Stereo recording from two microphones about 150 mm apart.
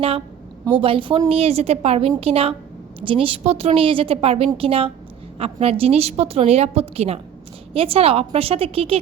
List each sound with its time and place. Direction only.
0.6 s a woman's voice: 35° right (ahead or behind)